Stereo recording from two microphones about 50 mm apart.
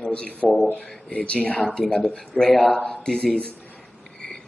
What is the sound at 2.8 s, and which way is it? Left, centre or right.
Speech, centre.